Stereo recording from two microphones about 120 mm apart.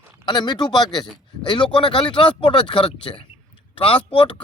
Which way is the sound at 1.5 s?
40° left (ahead or behind).